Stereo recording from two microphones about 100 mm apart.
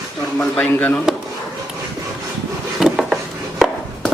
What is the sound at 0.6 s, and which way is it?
Speech, 15° left (ahead or behind).